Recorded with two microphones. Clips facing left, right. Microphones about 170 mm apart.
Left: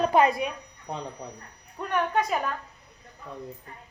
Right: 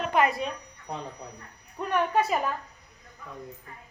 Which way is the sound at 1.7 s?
5° right (ahead or behind).